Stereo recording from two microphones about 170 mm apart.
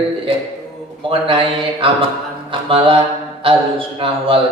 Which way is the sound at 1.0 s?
30° right (ahead or behind).